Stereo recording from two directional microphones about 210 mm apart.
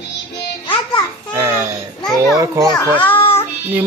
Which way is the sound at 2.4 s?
15° right (ahead or behind).